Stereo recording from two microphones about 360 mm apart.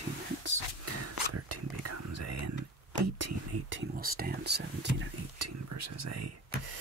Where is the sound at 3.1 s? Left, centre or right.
Right.